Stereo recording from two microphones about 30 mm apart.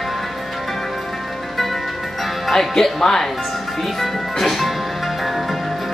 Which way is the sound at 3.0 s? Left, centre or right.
Centre.